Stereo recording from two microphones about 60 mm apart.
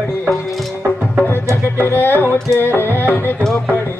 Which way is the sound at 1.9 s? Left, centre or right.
Left.